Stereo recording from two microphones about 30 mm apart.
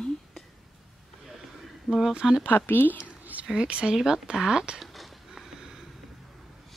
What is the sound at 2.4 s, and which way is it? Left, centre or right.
Speech, left.